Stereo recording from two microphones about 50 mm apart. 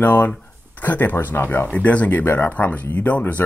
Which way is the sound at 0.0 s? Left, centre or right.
Left.